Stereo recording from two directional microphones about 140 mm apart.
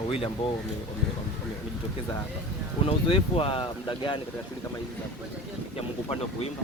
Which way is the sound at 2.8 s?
40° left (ahead or behind).